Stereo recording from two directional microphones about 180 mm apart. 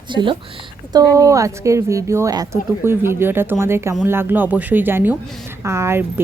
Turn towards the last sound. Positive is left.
turn(degrees=-15)  # may be behind; listen again after turning